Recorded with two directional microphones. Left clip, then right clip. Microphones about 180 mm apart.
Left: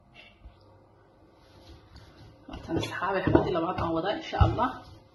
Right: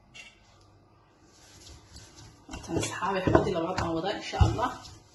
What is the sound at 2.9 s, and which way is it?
Speech, 35° left (ahead or behind).